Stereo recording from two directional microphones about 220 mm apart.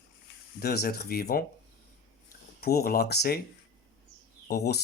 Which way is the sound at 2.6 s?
45° left (ahead or behind).